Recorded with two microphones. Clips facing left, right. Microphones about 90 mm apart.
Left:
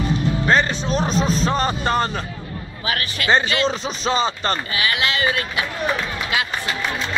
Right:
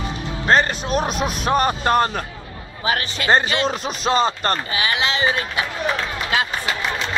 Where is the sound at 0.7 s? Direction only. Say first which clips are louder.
Even; 5° right (ahead or behind).